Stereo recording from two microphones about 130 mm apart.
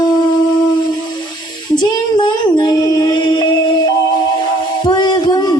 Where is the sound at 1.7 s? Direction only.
35° left (ahead or behind).